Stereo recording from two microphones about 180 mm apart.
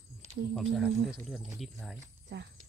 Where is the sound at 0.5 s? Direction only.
5° right (ahead or behind).